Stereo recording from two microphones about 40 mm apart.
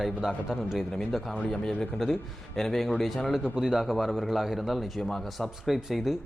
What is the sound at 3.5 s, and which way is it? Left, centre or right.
A man's voice, centre.